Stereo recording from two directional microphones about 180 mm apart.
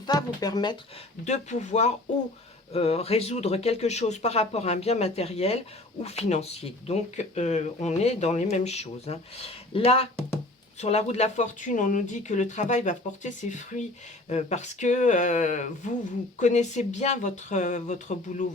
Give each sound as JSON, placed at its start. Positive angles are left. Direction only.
{"t": 0.0, "sound": "speech", "side_deg": 20}
{"t": 1.2, "sound": "speech", "side_deg": 40}